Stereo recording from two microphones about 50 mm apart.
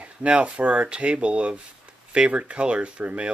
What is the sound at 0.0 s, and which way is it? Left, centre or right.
Speech, right.